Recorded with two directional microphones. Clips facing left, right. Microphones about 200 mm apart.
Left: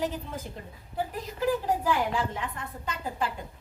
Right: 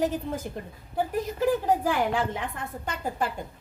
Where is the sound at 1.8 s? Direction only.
60° right (ahead or behind).